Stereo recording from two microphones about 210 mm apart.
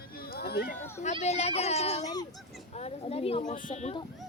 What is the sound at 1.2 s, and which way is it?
Speech, 30° left (ahead or behind).